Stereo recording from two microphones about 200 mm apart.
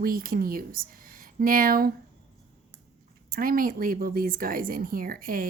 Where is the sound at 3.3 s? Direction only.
45° right (ahead or behind).